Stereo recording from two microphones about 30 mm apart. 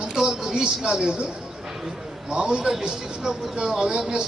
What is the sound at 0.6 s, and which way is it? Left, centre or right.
Cricket, right.